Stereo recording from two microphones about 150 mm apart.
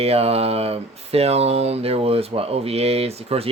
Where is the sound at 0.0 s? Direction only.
45° right (ahead or behind).